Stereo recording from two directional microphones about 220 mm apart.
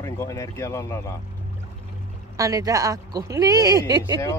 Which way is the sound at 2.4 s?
15° right (ahead or behind).